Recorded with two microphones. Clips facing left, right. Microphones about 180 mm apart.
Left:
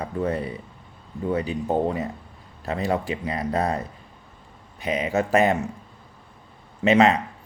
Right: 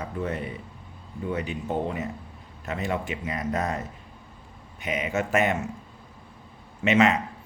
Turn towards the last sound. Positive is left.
turn(degrees=35)  # may be behind; listen again after turning